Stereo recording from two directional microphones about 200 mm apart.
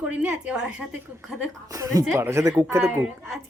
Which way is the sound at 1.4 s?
15° right (ahead or behind).